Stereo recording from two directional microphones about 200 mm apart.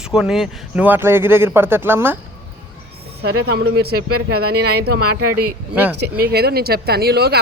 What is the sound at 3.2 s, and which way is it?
Speech, 55° right (ahead or behind).